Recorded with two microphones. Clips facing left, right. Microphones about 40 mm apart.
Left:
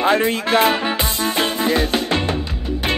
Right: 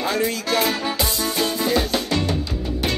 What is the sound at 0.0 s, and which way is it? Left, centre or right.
Music, left.